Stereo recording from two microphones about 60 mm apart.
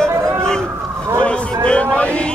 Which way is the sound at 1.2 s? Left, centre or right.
Centre.